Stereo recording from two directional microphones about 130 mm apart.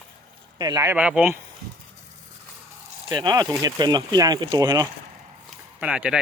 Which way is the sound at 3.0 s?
35° right (ahead or behind).